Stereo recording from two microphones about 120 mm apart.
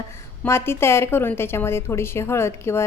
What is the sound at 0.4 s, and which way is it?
A woman's voice, 20° left (ahead or behind).